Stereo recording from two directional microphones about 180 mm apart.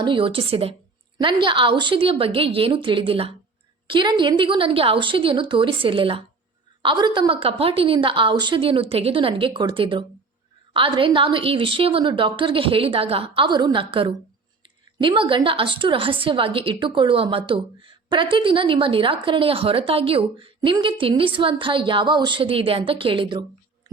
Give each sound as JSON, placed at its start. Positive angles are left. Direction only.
{"t": 0.0, "sound": "a woman's voice", "side_deg": -30}